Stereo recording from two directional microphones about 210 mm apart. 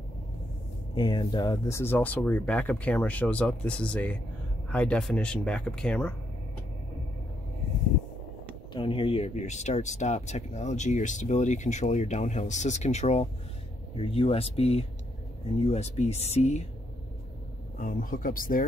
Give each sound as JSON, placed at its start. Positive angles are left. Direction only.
{"t": 0.9, "sound": "speech", "side_deg": 20}
{"t": 8.7, "sound": "speech", "side_deg": 25}
{"t": 17.7, "sound": "speech", "side_deg": 40}